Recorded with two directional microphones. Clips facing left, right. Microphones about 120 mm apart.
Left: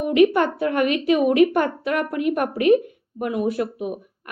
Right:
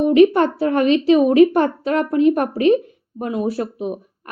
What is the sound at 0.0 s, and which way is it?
A woman's voice, 30° right (ahead or behind).